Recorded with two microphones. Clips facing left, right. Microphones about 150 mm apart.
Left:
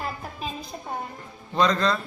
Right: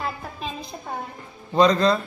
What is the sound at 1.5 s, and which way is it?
Speech, 20° right (ahead or behind).